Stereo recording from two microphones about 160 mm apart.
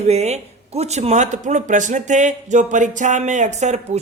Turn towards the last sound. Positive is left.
turn(degrees=-45)  # may be behind; listen again after turning